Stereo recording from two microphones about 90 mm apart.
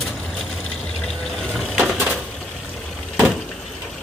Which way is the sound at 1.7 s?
10° right (ahead or behind).